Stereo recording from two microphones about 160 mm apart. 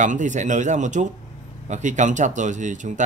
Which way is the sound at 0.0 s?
50° right (ahead or behind).